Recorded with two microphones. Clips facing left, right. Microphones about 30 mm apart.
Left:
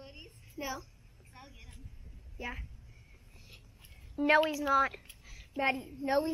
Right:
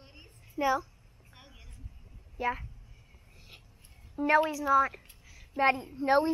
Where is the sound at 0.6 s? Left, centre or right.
Right.